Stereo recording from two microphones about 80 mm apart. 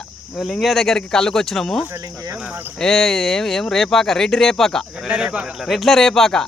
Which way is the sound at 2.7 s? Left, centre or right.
Centre.